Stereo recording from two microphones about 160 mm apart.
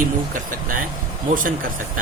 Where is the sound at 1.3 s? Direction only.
60° right (ahead or behind).